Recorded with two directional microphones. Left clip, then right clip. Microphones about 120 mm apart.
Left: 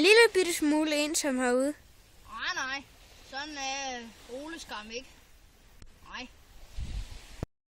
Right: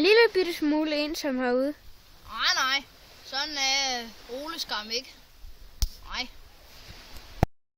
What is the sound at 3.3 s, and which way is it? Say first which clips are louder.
Speech: right 9 dB; 15° right (ahead or behind).